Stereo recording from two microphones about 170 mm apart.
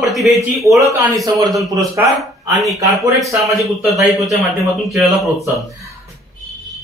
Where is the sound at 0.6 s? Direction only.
20° right (ahead or behind).